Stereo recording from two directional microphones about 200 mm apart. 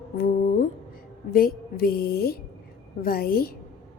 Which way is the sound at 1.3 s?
45° left (ahead or behind).